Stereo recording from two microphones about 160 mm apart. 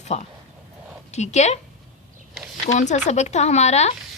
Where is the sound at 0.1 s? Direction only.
40° left (ahead or behind).